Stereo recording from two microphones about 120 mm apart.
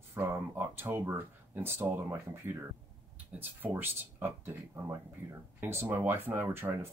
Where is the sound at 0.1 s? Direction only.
20° right (ahead or behind).